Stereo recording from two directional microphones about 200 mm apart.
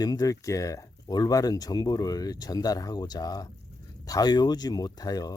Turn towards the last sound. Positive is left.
turn(degrees=20)  # may be behind; listen again after turning